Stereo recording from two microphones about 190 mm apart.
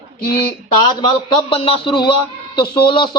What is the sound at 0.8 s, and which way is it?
A man's voice, 25° left (ahead or behind).